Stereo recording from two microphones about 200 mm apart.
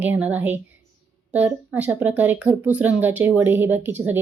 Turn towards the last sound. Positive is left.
turn(degrees=-10)  # may be behind; listen again after turning